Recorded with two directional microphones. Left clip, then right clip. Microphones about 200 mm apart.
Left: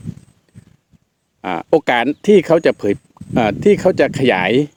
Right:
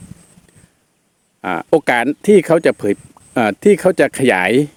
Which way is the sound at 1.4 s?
10° right (ahead or behind).